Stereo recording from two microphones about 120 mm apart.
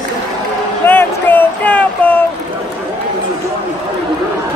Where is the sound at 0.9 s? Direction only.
15° left (ahead or behind).